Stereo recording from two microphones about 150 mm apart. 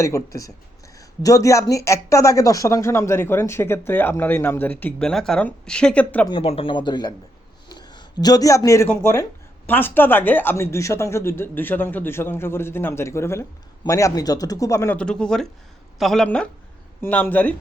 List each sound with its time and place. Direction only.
0.0 s speech: 20° left (ahead or behind)
6.2 s speech: 35° left (ahead or behind); by 14.9 s 20° left (ahead or behind)
14.9 s speech: 5° left (ahead or behind)